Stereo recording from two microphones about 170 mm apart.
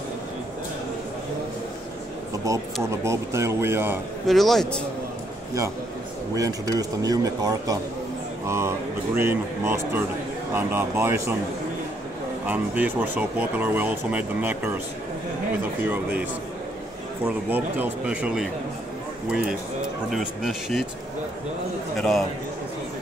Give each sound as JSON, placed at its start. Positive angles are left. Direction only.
{"t": 2.3, "sound": "speech", "side_deg": -20}
{"t": 4.3, "sound": "speech", "side_deg": 0}
{"t": 6.3, "sound": "speech", "side_deg": -20}
{"t": 12.4, "sound": "speech", "side_deg": -10}
{"t": 17.2, "sound": "speech", "side_deg": -10}
{"t": 21.9, "sound": "speech", "side_deg": 0}